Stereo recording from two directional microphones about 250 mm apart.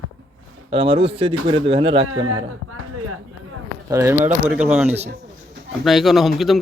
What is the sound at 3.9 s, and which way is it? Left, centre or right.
Speech, centre.